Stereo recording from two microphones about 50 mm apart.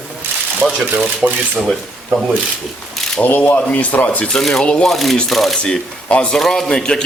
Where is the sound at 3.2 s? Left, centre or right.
Left.